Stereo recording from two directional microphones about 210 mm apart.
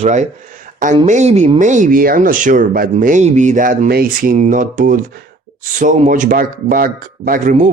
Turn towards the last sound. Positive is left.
turn(degrees=-35)  # may be behind; listen again after turning